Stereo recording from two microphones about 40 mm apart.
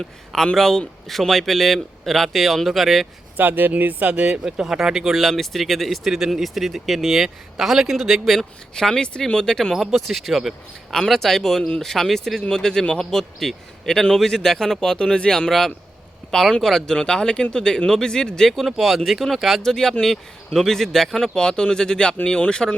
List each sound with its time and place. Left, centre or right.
0.5 s a man's voice: centre
3.3 s speech: right
4.1 s speech: right
4.4 s speech: centre
5.2 s a man's voice: centre
6.1 s speech: centre
6.4 s a man's voice: centre
8.4 s speech: centre
9.9 s a man's voice: centre
11.1 s speech: centre
12.4 s speech: centre
15.4 s speech: centre
18.6 s a man's voice: centre
19.6 s speech: centre